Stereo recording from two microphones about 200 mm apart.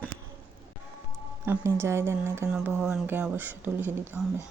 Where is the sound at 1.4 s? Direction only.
10° right (ahead or behind).